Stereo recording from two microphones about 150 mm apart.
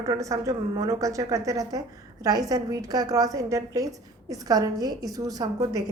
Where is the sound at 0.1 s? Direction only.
20° right (ahead or behind).